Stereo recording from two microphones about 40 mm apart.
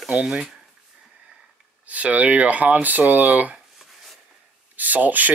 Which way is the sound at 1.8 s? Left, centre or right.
Right.